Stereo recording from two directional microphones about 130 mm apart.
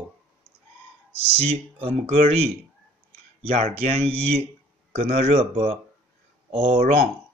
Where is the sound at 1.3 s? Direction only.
50° right (ahead or behind).